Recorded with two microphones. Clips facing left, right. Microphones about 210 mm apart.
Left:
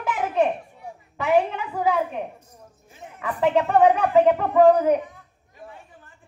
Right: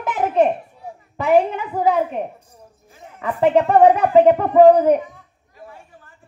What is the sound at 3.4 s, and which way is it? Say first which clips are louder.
Speech: right 5 dB; 45° right (ahead or behind).